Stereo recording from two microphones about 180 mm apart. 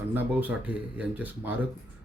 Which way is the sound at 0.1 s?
10° right (ahead or behind).